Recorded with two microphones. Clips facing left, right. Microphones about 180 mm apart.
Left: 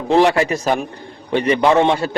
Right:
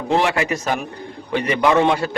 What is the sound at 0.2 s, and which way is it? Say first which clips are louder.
A man's voice: left 6 dB; 35° left (ahead or behind).